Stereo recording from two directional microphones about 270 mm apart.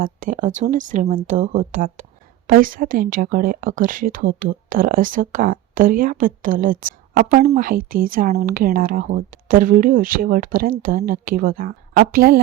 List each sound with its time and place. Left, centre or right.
0.0 s speech: right